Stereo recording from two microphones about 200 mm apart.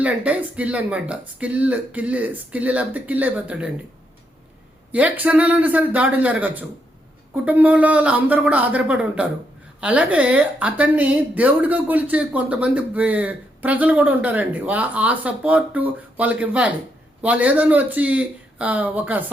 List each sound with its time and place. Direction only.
0.0 s a woman's voice: 5° right (ahead or behind)
4.9 s a woman's voice: 5° right (ahead or behind)